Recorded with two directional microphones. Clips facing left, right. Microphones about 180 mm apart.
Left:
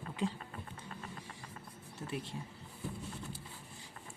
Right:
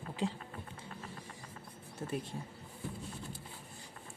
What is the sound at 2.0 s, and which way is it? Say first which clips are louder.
Speech: right 3 dB; 50° right (ahead or behind).